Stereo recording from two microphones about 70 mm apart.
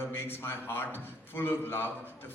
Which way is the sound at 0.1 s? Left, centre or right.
Left.